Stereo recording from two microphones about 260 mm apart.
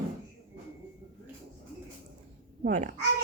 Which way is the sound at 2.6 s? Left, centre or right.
Right.